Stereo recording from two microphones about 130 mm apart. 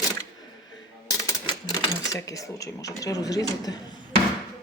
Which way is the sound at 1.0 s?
25° left (ahead or behind).